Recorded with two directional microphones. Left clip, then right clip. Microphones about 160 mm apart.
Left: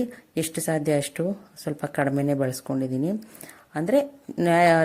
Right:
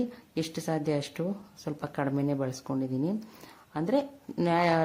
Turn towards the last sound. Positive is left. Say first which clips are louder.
# left 7 dB
turn(degrees=15)  # may be behind; listen again after turning